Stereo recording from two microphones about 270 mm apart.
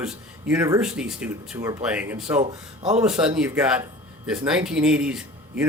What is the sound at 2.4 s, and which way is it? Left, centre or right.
Speech, right.